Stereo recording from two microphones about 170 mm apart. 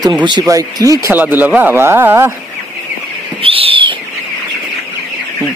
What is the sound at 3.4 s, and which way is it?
Owl, 35° right (ahead or behind).